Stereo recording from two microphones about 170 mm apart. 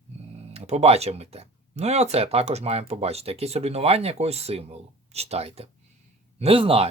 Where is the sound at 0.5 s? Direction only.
40° right (ahead or behind).